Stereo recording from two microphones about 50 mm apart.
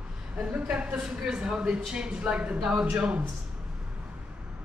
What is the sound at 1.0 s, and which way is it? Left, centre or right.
A woman's voice, centre.